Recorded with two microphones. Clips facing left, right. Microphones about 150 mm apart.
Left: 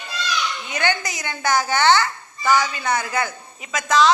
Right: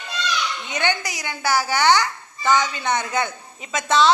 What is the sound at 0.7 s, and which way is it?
Speech, 20° right (ahead or behind).